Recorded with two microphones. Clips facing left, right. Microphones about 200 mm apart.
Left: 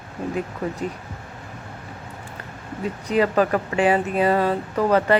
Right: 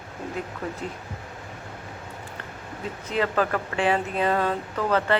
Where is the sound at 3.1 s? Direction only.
15° left (ahead or behind).